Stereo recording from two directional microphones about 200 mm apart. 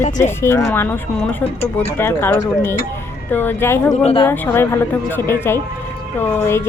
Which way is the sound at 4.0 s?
30° left (ahead or behind).